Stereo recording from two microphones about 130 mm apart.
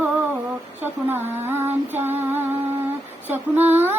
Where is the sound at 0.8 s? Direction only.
15° right (ahead or behind).